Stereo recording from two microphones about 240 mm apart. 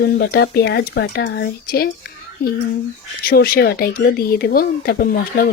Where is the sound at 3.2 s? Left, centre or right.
Left.